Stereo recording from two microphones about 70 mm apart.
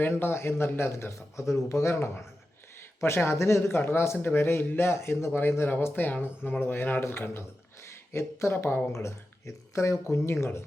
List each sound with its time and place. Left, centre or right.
0.0 s speech: left
2.7 s a sound: left
3.2 s speech: left
8.9 s speech: left